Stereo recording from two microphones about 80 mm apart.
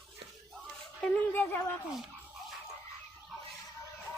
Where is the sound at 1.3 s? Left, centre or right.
Left.